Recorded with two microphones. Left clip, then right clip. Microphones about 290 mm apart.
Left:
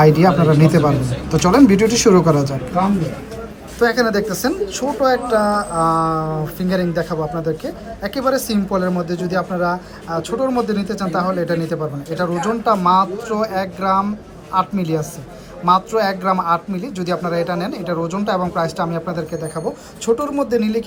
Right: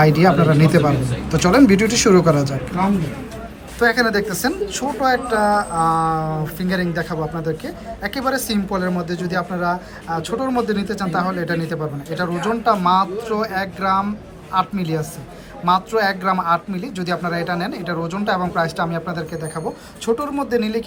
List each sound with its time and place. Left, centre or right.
0.0 s speech: centre
3.8 s speech: centre